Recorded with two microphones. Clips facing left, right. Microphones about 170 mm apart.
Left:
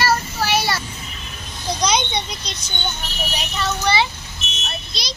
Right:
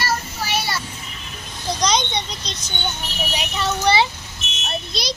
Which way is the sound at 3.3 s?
20° right (ahead or behind).